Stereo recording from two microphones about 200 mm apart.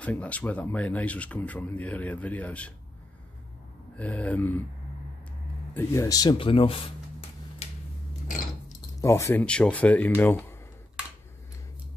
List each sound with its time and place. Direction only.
0.0 s speech: 5° left (ahead or behind)
3.9 s speech: 5° left (ahead or behind)
5.8 s speech: 15° left (ahead or behind)
9.0 s speech: 15° left (ahead or behind)